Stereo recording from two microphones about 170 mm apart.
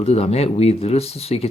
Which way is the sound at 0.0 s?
35° left (ahead or behind).